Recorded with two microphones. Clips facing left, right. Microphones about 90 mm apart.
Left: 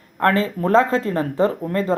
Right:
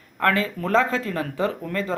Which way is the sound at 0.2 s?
35° left (ahead or behind).